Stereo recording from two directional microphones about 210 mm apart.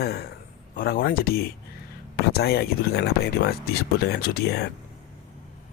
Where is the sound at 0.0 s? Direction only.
50° left (ahead or behind).